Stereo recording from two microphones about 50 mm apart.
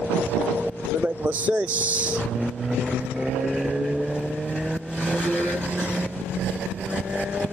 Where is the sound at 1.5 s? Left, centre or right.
Right.